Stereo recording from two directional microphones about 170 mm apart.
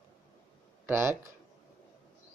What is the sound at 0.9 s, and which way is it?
Speech, 15° right (ahead or behind).